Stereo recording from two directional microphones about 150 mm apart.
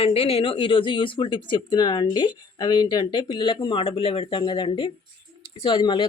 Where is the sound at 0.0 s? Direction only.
40° left (ahead or behind).